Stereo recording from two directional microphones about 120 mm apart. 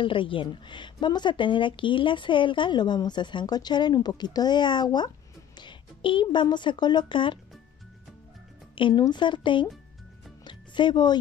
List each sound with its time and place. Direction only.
0.0 s speech: 45° left (ahead or behind)
8.7 s speech: 45° left (ahead or behind)
10.4 s music: 40° left (ahead or behind)